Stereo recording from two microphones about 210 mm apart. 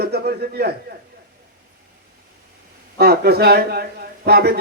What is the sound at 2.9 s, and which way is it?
A man's voice, 45° right (ahead or behind).